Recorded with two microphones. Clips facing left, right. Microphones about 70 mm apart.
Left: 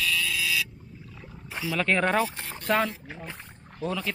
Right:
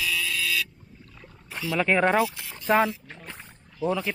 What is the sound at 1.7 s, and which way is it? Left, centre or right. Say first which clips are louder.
Speech: right 3 dB; centre.